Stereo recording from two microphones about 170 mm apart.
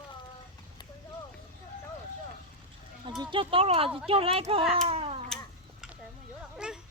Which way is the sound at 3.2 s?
30° right (ahead or behind).